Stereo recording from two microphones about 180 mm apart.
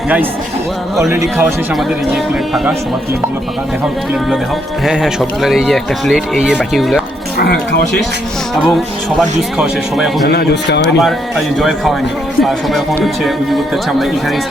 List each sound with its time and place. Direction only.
4.9 s speech: centre (ahead or behind)
7.3 s speech: 60° left (ahead or behind)
9.6 s speech: centre (ahead or behind)
10.2 s speech: 60° left (ahead or behind)
12.4 s speech: centre (ahead or behind)